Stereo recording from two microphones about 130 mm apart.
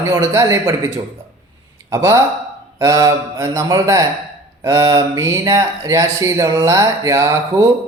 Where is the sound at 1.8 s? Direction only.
25° right (ahead or behind).